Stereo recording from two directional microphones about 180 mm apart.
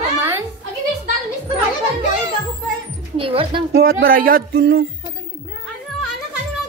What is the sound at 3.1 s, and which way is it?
Speech, 30° right (ahead or behind).